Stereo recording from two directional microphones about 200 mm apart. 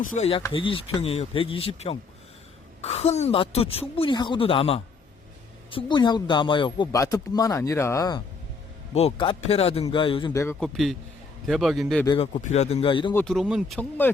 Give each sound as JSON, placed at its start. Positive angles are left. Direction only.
{"t": 0.0, "sound": "speech", "side_deg": 40}
{"t": 0.4, "sound": "speech", "side_deg": 25}
{"t": 9.0, "sound": "speech", "side_deg": 30}
{"t": 10.6, "sound": "speech", "side_deg": 0}
{"t": 12.0, "sound": "speech", "side_deg": 25}
{"t": 13.1, "sound": "speech", "side_deg": 0}